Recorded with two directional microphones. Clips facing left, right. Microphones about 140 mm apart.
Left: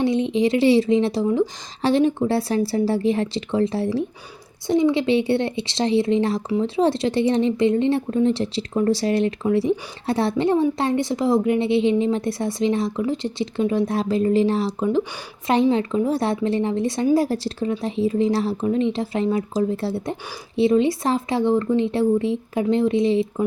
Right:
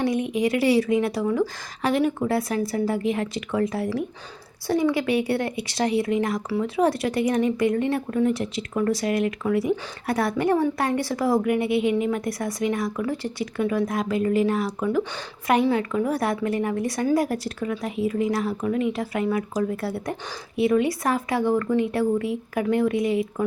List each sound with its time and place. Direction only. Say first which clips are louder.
0.0 s speech: left 4 dB; 25° left (ahead or behind)